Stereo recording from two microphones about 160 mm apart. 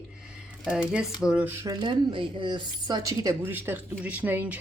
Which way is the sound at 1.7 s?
30° right (ahead or behind).